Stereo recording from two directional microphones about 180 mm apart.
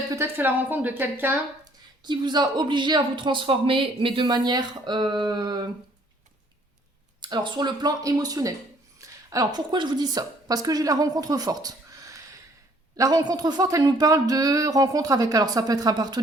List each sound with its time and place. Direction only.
0.1 s a woman's voice: 10° right (ahead or behind)
2.0 s a woman's voice: 25° right (ahead or behind)
7.2 s a woman's voice: 25° right (ahead or behind)
9.0 s a sound: 20° right (ahead or behind)
9.6 s a woman's voice: 25° right (ahead or behind)